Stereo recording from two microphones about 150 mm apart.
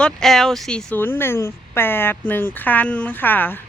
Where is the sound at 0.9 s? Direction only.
15° left (ahead or behind).